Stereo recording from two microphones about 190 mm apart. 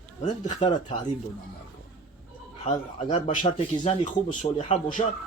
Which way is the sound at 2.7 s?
30° left (ahead or behind).